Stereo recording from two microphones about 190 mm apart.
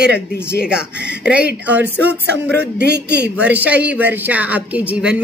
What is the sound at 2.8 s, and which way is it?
Speech, 60° right (ahead or behind).